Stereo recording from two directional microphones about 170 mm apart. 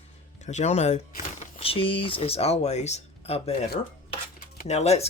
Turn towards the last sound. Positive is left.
turn(degrees=40)  # may be behind; listen again after turning